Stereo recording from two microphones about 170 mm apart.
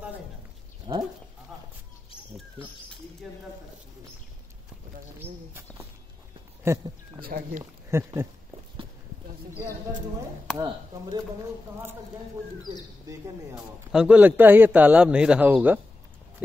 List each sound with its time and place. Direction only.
0.9 s goat: 25° right (ahead or behind)
3.3 s a sound: 5° right (ahead or behind)
5.2 s a sound: 15° right (ahead or behind)
6.7 s a man's voice: 15° right (ahead or behind)
7.2 s speech: 60° right (ahead or behind)
7.9 s a man's voice: 15° right (ahead or behind)
10.5 s chop: centre (ahead or behind)
13.0 s speech: 20° right (ahead or behind)
13.9 s a man's voice: 5° right (ahead or behind)